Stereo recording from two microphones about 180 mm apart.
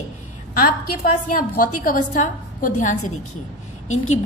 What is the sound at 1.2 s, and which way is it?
A woman's voice, 50° left (ahead or behind).